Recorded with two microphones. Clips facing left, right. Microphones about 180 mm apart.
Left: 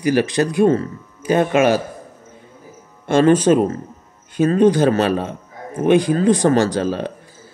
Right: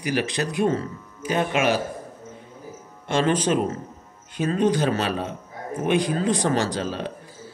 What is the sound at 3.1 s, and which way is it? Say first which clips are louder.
Speech: left 8 dB; 50° left (ahead or behind).